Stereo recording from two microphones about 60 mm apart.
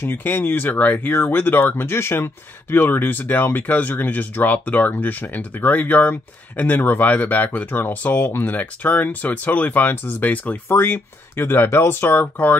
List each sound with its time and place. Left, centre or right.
0.0 s speech: left
10.7 s speech: left